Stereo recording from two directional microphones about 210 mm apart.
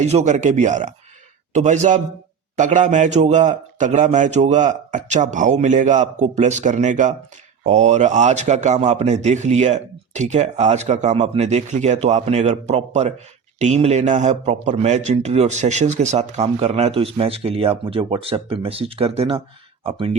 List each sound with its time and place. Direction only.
0.0 s a man's voice: 30° right (ahead or behind)